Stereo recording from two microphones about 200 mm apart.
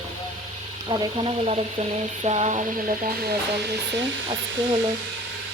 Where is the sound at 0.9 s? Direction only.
25° right (ahead or behind).